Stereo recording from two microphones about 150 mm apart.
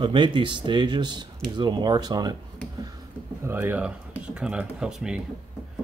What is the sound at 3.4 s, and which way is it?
Speech, 15° right (ahead or behind).